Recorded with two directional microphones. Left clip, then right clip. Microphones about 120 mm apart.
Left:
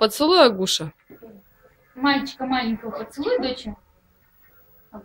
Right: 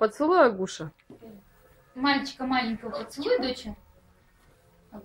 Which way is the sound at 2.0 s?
35° right (ahead or behind).